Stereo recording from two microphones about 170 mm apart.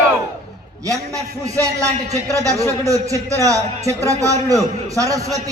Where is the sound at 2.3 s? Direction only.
20° right (ahead or behind).